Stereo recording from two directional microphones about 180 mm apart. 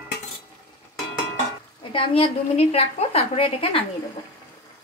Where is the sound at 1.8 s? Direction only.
30° left (ahead or behind).